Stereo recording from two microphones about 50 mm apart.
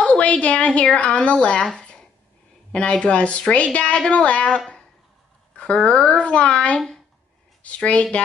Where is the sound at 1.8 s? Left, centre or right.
Centre.